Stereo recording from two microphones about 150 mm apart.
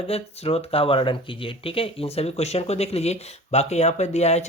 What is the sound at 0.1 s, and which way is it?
Speech, 40° left (ahead or behind).